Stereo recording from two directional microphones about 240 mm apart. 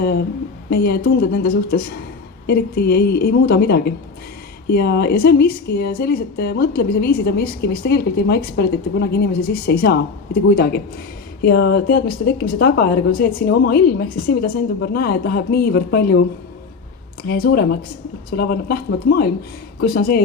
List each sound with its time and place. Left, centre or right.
0.0 s a sound: left
0.7 s speech: left
17.2 s speech: left